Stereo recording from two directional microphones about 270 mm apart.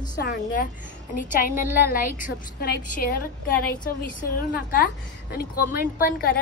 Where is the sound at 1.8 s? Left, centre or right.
Left.